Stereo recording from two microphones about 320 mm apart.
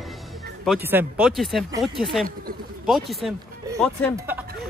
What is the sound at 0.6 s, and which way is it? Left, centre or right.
Speech, centre.